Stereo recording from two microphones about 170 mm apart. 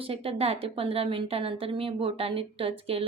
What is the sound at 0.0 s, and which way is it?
A woman's voice, 35° right (ahead or behind).